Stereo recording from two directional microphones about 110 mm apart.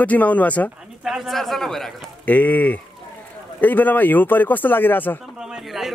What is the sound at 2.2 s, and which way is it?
Speech, 15° left (ahead or behind).